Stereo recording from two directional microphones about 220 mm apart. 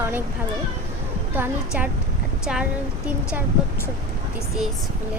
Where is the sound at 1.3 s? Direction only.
10° right (ahead or behind).